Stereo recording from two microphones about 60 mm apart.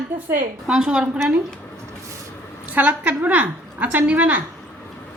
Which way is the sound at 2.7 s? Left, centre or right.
Right.